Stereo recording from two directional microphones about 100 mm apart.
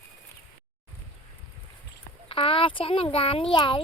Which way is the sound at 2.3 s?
65° left (ahead or behind).